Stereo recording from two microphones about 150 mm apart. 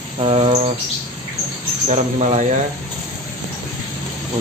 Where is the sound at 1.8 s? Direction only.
50° right (ahead or behind).